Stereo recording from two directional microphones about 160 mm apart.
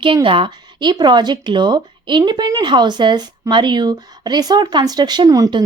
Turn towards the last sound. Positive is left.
turn(degrees=-20)  # may be behind; listen again after turning